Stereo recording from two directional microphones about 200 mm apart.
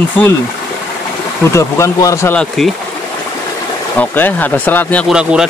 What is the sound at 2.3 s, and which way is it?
Speech, centre (ahead or behind).